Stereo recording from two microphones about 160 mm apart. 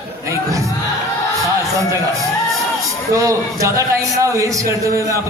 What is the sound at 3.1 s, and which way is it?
A man's voice, 20° right (ahead or behind).